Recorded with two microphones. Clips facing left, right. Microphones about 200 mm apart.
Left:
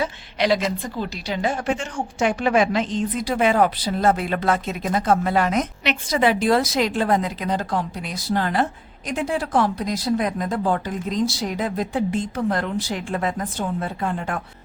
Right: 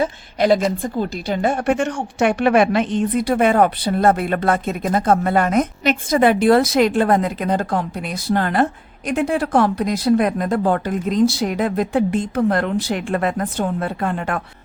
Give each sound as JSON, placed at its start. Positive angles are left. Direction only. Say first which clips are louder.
{"t": 0.0, "sound": "a woman's voice", "louder": "right 4 dB", "side_deg": -50}